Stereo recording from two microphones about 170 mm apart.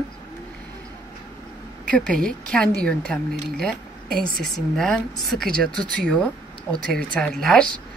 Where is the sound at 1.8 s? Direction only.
5° left (ahead or behind).